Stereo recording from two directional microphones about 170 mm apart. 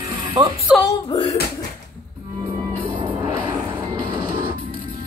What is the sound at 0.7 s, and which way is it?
Speech, 5° right (ahead or behind).